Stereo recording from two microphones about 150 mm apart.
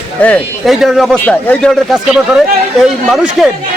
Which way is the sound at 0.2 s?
10° left (ahead or behind).